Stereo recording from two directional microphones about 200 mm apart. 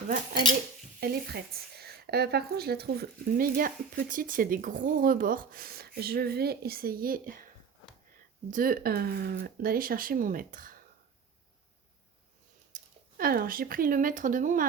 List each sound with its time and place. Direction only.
0.9 s speech: 50° right (ahead or behind)
12.7 s speech: 45° right (ahead or behind)